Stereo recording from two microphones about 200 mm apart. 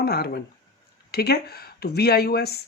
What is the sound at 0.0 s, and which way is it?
Speech, 50° left (ahead or behind).